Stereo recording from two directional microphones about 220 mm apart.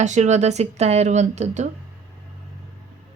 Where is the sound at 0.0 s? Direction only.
30° right (ahead or behind).